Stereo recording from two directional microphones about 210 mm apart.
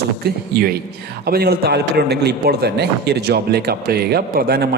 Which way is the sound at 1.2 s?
45° right (ahead or behind).